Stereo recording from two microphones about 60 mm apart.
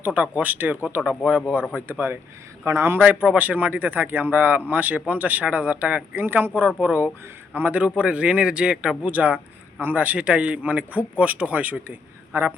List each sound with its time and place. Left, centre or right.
0.0 s speech: right
1.9 s a man's voice: right
3.1 s speech: right